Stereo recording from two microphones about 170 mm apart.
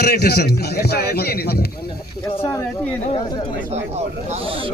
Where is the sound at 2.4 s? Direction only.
10° left (ahead or behind).